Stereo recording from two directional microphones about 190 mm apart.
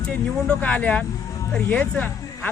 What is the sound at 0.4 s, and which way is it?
Speech, 5° left (ahead or behind).